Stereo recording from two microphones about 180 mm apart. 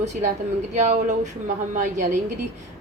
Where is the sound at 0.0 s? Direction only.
40° right (ahead or behind).